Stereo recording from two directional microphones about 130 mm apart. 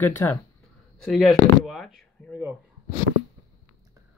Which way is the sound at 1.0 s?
Centre (ahead or behind).